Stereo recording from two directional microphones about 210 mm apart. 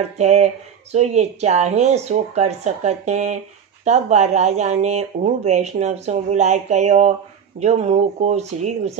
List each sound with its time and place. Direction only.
0.0 s speech: 30° right (ahead or behind)